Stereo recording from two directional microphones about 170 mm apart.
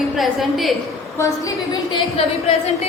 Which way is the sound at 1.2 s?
20° left (ahead or behind).